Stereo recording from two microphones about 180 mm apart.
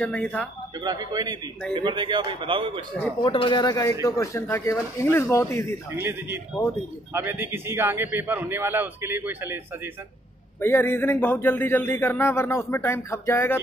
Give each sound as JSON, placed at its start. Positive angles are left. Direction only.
{"t": 0.0, "sound": "speech", "side_deg": 10}
{"t": 0.7, "sound": "a man's voice", "side_deg": -20}
{"t": 3.3, "sound": "speech", "side_deg": 25}
{"t": 5.9, "sound": "a man's voice", "side_deg": -15}
{"t": 10.6, "sound": "speech", "side_deg": 10}